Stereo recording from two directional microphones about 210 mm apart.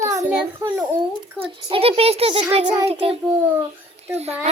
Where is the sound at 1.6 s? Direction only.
25° right (ahead or behind).